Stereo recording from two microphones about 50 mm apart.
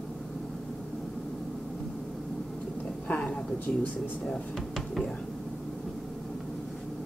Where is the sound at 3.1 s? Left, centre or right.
Left.